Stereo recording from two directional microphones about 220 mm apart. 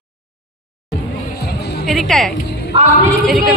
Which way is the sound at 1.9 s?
Centre (ahead or behind).